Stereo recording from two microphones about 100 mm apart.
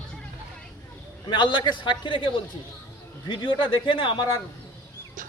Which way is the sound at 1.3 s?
50° left (ahead or behind).